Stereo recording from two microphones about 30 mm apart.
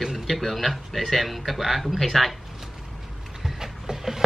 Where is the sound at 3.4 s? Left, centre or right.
Centre.